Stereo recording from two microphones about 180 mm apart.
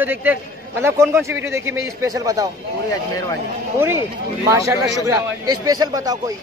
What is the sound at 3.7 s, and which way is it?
A man's voice, 15° right (ahead or behind).